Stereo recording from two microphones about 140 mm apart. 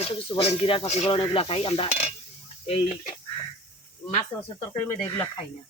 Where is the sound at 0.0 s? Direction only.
45° left (ahead or behind).